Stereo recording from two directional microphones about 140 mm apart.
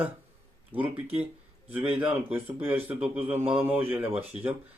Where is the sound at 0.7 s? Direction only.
45° right (ahead or behind).